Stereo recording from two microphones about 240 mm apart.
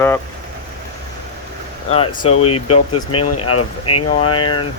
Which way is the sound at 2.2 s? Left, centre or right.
Left.